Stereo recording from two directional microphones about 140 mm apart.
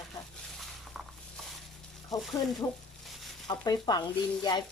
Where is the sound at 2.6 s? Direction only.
Centre (ahead or behind).